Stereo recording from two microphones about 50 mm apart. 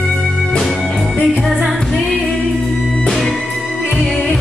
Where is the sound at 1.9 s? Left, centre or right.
Centre.